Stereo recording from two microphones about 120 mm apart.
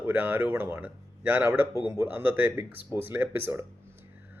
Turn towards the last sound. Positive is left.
turn(degrees=-15)  # may be behind; listen again after turning